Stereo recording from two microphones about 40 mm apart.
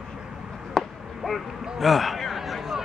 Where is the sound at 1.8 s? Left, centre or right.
Centre.